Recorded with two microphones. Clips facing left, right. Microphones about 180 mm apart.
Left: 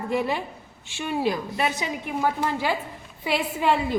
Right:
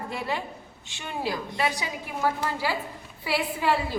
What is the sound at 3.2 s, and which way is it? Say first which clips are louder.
Speech: left 2 dB; 20° left (ahead or behind).